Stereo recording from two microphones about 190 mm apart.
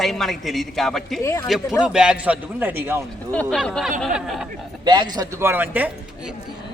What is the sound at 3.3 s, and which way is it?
A man's voice, 5° left (ahead or behind).